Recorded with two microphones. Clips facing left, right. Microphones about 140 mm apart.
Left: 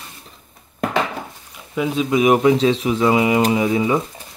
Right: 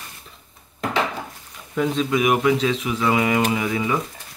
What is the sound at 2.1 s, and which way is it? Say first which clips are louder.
Speech: left 7 dB; 25° left (ahead or behind).